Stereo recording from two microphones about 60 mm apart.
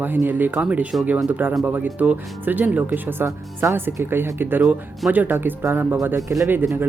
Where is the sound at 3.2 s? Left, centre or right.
Right.